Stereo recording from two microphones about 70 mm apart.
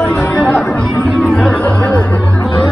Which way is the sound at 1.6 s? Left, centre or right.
Left.